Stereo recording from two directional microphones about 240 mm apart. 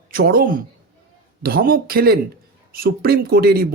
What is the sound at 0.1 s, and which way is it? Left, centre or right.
Speech, right.